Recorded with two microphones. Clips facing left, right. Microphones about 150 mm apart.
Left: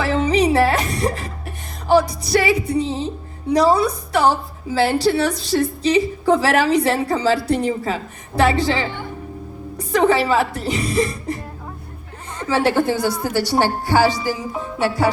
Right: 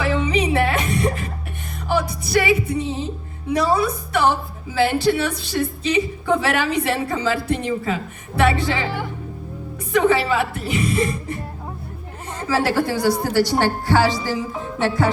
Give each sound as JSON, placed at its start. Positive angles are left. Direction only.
{"t": 0.0, "sound": "music", "side_deg": 40}
{"t": 1.9, "sound": "a woman's voice", "side_deg": 35}
{"t": 9.9, "sound": "a woman's voice", "side_deg": 35}
{"t": 12.5, "sound": "a woman's voice", "side_deg": 20}